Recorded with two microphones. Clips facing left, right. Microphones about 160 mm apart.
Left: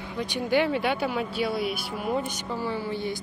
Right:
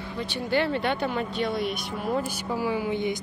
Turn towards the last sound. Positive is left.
turn(degrees=-20)  # may be behind; listen again after turning